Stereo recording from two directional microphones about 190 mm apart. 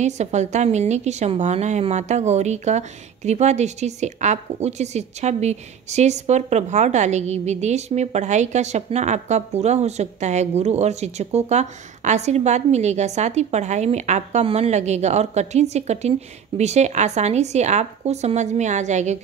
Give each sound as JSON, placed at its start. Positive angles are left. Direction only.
{"t": 0.0, "sound": "a woman's voice", "side_deg": -35}